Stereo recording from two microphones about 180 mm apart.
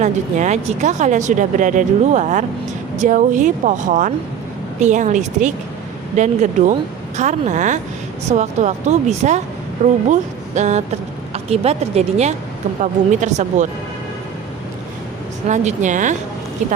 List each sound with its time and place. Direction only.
0.0 s speech: 40° right (ahead or behind)
15.4 s speech: 40° right (ahead or behind)